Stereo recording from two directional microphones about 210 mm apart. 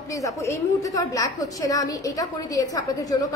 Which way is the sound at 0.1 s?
15° left (ahead or behind).